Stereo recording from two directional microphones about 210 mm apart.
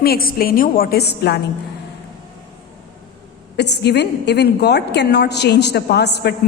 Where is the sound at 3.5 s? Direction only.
55° left (ahead or behind).